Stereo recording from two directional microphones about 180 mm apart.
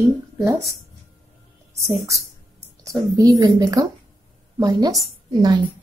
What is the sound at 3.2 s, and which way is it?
A woman's voice, 20° right (ahead or behind).